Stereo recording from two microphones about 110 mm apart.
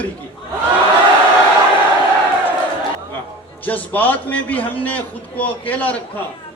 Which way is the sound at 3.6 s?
15° left (ahead or behind).